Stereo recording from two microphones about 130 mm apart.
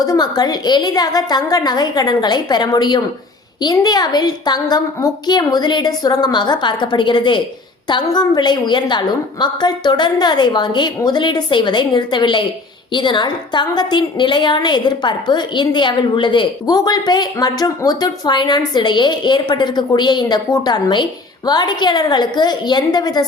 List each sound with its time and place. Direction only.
0.0 s a woman's voice: 30° left (ahead or behind)